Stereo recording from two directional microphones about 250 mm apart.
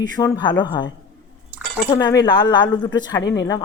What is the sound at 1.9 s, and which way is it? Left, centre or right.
A woman's voice, centre.